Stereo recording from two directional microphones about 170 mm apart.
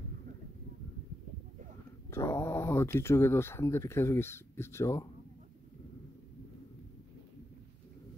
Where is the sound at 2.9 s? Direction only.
15° left (ahead or behind).